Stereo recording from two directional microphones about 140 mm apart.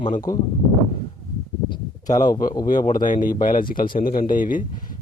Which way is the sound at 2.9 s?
70° left (ahead or behind).